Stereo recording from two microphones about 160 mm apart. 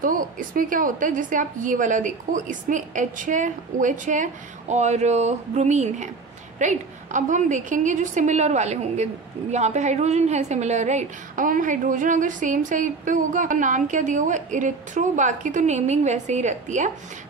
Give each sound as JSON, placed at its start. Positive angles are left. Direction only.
{"t": 0.0, "sound": "a woman's voice", "side_deg": -55}